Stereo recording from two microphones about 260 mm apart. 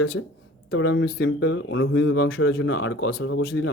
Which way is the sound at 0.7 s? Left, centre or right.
Left.